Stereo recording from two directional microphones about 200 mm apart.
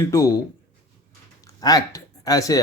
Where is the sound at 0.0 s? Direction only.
15° left (ahead or behind).